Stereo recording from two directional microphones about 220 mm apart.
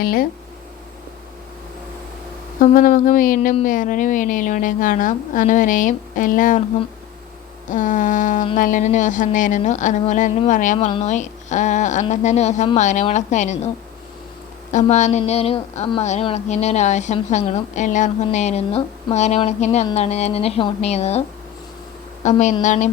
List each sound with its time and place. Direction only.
0.0 s a woman's voice: 40° left (ahead or behind)
2.6 s a woman's voice: 40° left (ahead or behind)
7.7 s a woman's voice: 35° left (ahead or behind)
14.7 s a woman's voice: 35° left (ahead or behind)